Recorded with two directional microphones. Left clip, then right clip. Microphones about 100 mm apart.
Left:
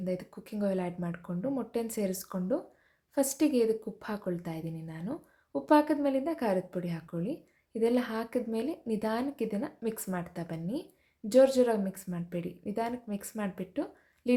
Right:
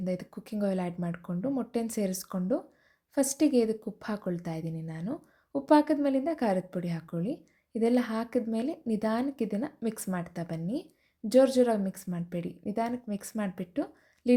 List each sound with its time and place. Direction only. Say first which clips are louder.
0.0 s a woman's voice: right 1 dB; 40° right (ahead or behind)